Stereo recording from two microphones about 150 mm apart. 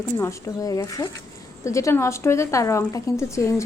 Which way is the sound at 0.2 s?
20° left (ahead or behind).